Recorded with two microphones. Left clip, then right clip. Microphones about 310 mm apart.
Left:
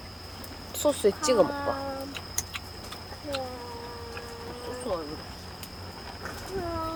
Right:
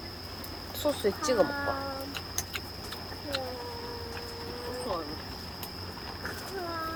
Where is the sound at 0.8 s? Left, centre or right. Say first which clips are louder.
Left 5 dB; left.